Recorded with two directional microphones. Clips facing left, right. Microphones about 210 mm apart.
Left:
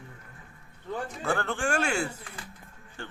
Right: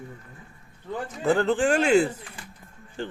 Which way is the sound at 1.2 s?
15° right (ahead or behind).